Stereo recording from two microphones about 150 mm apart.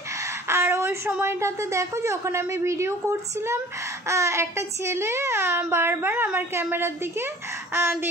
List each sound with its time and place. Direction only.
0.2 s a woman's voice: 20° right (ahead or behind)